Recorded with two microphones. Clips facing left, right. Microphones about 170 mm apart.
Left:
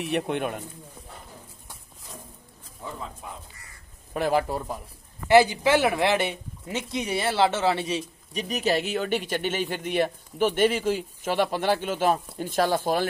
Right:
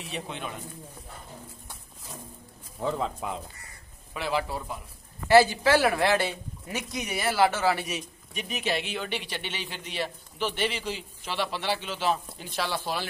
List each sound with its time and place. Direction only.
0.0 s speech: 60° left (ahead or behind)
2.8 s speech: 90° right
4.1 s speech: 45° left (ahead or behind)
5.3 s speech: 20° left (ahead or behind); by 13.0 s 45° left (ahead or behind)